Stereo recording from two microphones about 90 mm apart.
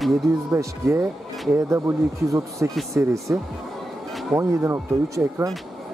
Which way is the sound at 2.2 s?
35° right (ahead or behind).